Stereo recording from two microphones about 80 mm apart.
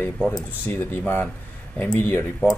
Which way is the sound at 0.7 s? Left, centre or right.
Left.